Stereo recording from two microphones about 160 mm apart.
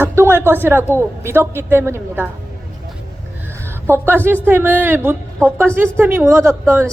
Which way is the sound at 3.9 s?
15° right (ahead or behind).